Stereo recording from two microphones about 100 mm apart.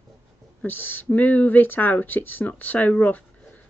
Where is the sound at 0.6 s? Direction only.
20° left (ahead or behind).